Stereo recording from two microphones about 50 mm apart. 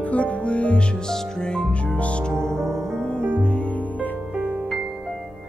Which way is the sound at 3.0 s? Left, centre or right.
Centre.